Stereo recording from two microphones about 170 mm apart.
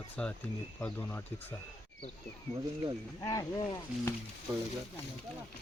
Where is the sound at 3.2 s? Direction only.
20° left (ahead or behind).